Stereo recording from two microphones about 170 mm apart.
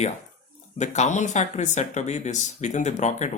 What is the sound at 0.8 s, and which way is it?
Speech, 40° left (ahead or behind).